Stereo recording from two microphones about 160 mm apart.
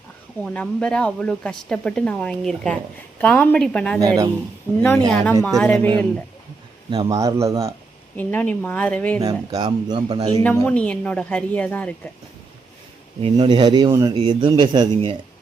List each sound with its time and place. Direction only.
0.4 s speech: 5° left (ahead or behind)
4.0 s speech: 20° right (ahead or behind)
4.8 s speech: 10° left (ahead or behind)
6.9 s speech: 25° right (ahead or behind)
8.1 s speech: 10° left (ahead or behind)
9.2 s speech: 25° right (ahead or behind)
10.3 s speech: 15° left (ahead or behind)
13.4 s speech: 30° right (ahead or behind)